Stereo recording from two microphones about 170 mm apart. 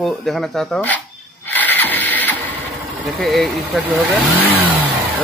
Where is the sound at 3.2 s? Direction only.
Centre (ahead or behind).